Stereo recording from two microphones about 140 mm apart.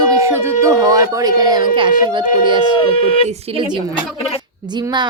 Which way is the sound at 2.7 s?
40° left (ahead or behind).